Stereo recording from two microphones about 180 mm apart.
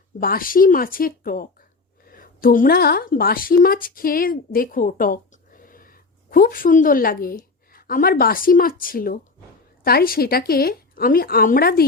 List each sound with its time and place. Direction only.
0.2 s a woman's voice: 50° left (ahead or behind)